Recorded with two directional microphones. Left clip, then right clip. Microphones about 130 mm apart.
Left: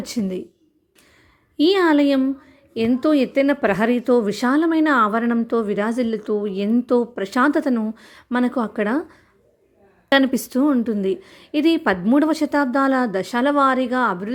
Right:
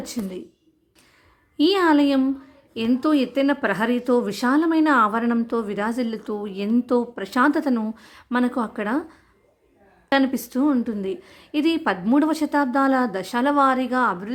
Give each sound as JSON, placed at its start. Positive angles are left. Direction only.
{"t": 0.0, "sound": "speech", "side_deg": 40}
{"t": 1.5, "sound": "speech", "side_deg": 20}